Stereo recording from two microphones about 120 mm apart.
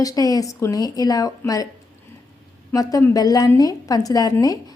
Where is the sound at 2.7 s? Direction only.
30° left (ahead or behind).